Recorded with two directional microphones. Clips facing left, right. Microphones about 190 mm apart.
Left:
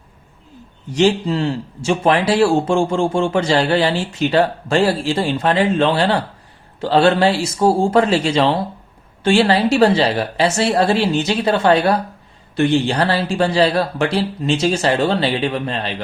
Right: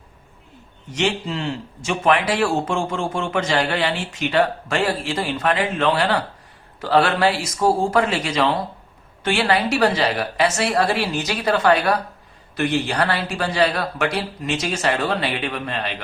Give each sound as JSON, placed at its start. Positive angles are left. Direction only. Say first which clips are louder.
{"t": 0.9, "sound": "speech", "louder": "left 7 dB", "side_deg": 35}